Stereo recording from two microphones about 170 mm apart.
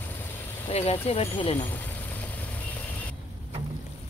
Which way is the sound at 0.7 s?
35° left (ahead or behind).